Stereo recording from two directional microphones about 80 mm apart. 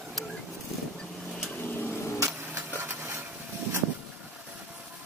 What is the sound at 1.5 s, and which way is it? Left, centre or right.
Vehicle, left.